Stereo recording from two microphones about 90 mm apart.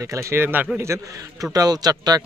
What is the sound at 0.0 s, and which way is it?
A man's voice, 35° right (ahead or behind).